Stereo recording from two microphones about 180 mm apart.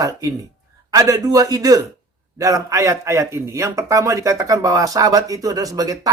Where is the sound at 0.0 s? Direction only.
20° right (ahead or behind).